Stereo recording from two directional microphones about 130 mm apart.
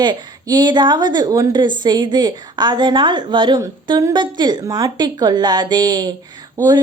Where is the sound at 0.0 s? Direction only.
35° right (ahead or behind).